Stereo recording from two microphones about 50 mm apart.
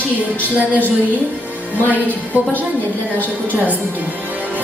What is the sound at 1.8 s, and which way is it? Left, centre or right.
Speech, left.